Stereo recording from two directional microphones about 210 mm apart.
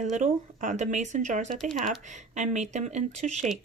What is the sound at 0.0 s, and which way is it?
Speech, 35° right (ahead or behind).